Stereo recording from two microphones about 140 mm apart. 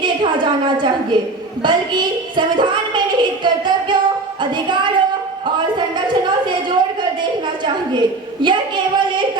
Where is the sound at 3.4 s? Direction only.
35° right (ahead or behind).